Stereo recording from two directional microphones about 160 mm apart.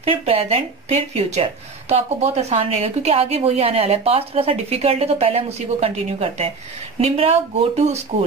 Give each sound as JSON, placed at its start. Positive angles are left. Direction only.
{"t": 0.0, "sound": "speech", "side_deg": -40}